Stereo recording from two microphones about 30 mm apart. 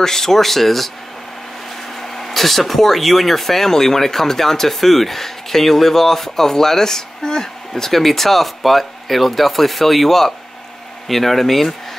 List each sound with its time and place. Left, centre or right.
0.0 s speech: centre
2.0 s speech: centre